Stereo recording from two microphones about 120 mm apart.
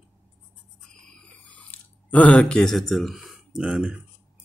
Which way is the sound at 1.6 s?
10° left (ahead or behind).